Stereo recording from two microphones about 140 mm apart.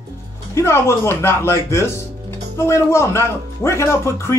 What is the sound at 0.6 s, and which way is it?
Speech, 20° left (ahead or behind).